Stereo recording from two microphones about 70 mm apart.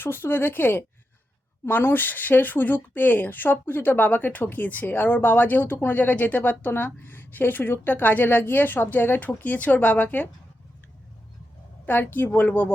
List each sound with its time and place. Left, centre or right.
0.0 s speech: left
11.9 s speech: left